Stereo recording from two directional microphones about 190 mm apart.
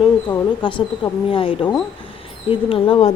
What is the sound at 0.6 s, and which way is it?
Speech, 25° left (ahead or behind).